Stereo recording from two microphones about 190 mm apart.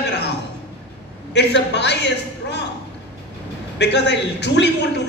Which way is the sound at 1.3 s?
65° left (ahead or behind).